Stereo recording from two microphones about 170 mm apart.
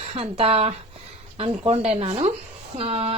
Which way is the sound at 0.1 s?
35° right (ahead or behind).